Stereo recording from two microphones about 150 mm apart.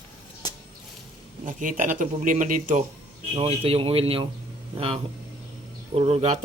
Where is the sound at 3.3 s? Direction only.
40° right (ahead or behind).